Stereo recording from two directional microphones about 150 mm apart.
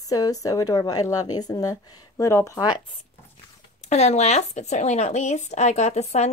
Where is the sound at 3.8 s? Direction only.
50° left (ahead or behind).